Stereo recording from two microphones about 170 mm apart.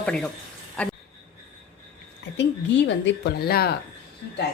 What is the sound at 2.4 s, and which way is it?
Speech, 80° left.